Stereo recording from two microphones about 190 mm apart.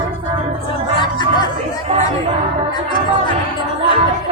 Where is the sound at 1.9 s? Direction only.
35° right (ahead or behind).